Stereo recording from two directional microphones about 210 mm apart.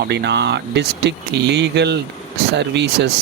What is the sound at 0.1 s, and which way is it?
Speech, 55° right (ahead or behind).